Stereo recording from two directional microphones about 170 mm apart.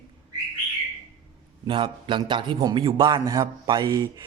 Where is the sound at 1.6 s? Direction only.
30° right (ahead or behind).